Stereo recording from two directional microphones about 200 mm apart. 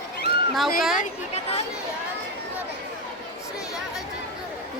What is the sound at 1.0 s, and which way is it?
Speech, 30° left (ahead or behind).